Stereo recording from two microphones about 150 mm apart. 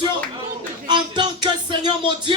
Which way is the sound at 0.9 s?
30° right (ahead or behind).